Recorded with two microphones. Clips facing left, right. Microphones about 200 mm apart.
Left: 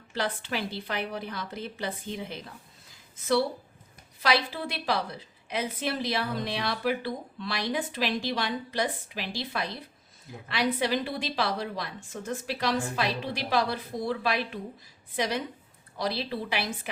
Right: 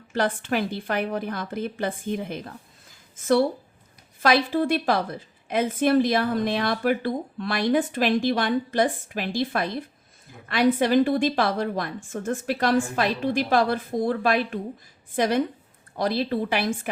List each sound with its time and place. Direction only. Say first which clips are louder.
0.1 s a woman's voice: right 7 dB; 50° right (ahead or behind)